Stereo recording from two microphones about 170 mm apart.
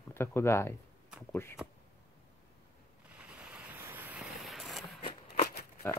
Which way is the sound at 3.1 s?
5° right (ahead or behind).